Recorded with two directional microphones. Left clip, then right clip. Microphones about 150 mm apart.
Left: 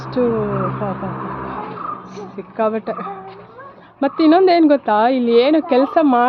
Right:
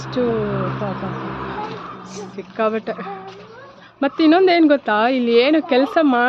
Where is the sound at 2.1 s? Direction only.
5° right (ahead or behind).